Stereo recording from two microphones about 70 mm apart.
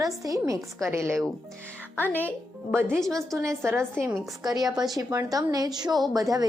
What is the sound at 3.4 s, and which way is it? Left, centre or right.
Speech, right.